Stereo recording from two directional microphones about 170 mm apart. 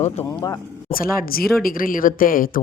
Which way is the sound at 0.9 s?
60° left (ahead or behind).